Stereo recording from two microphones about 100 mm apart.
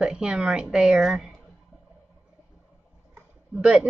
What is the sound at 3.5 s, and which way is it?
Speech, 10° right (ahead or behind).